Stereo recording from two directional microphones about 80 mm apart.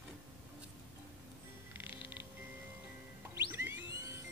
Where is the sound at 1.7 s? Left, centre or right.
Right.